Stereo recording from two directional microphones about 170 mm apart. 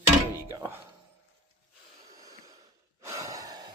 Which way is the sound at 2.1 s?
20° right (ahead or behind).